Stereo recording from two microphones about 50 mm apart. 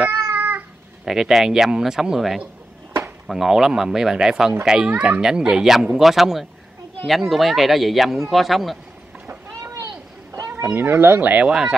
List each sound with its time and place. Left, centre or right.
0.3 s cat: right
1.0 s a child's voice: centre
10.5 s speech: right
10.9 s speech: right
11.1 s speech: right